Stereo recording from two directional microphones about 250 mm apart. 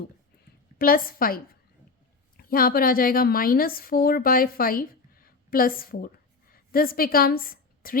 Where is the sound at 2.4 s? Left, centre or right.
Left.